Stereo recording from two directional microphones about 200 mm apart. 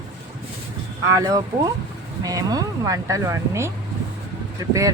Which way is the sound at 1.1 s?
15° right (ahead or behind).